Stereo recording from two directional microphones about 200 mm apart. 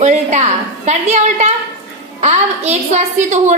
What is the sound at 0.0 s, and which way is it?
A woman's voice, 35° right (ahead or behind).